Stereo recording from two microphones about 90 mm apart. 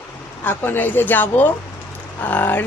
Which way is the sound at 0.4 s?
20° left (ahead or behind).